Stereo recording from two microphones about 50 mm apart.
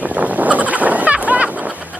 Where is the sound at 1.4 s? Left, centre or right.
Right.